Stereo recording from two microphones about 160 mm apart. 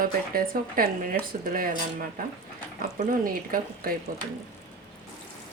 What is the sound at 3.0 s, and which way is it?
Speech, 60° right (ahead or behind).